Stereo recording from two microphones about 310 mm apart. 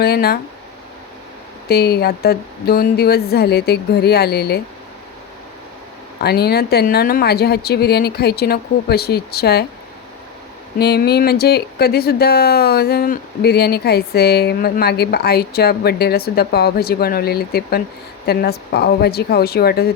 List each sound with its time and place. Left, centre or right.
0.0 s speech: left
1.6 s speech: left
6.1 s speech: left
10.8 s speech: left